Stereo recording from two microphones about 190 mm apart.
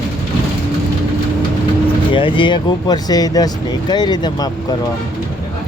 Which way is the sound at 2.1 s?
25° left (ahead or behind).